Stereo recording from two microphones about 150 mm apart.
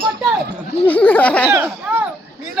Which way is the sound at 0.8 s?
10° left (ahead or behind).